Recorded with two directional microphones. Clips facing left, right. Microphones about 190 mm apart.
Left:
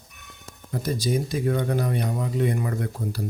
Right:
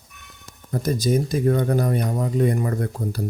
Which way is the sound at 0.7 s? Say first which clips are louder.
Right 4 dB; 45° right (ahead or behind).